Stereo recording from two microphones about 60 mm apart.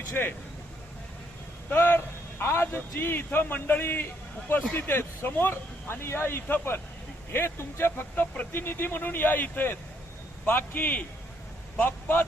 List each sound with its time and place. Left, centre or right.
0.1 s speech: left
1.7 s speech: left
2.4 s speech: left